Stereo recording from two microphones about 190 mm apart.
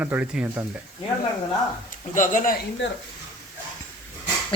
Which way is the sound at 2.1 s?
45° left (ahead or behind).